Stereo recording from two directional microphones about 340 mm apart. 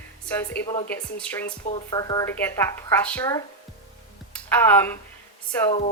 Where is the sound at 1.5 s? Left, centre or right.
Left.